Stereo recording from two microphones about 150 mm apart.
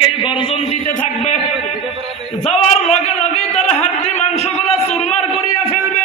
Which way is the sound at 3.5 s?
45° left (ahead or behind).